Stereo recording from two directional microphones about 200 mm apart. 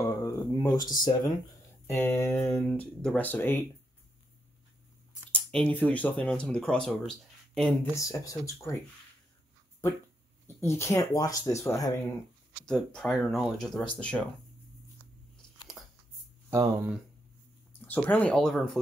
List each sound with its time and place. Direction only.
0.0 s a sound: 15° left (ahead or behind)
1.9 s speech: 10° left (ahead or behind)
5.3 s speech: 5° left (ahead or behind)
7.9 s speech: 15° left (ahead or behind)
10.4 s speech: 15° left (ahead or behind)
12.6 s speech: 5° left (ahead or behind)
15.8 s a sound: centre (ahead or behind)
16.4 s speech: 10° right (ahead or behind)
17.8 s speech: 10° left (ahead or behind)